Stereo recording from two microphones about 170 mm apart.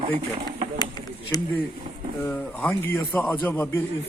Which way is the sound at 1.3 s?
20° left (ahead or behind).